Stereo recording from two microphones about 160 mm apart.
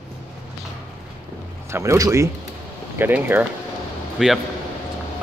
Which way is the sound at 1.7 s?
20° right (ahead or behind).